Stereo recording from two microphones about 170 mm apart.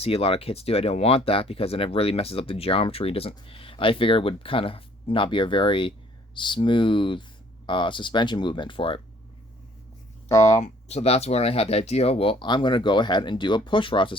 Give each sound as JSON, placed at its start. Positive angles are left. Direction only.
{"t": 0.0, "sound": "speech", "side_deg": 35}
{"t": 10.2, "sound": "speech", "side_deg": 20}
{"t": 10.6, "sound": "speech", "side_deg": 40}